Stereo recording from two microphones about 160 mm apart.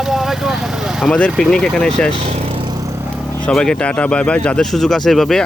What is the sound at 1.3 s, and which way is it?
Speech, centre (ahead or behind).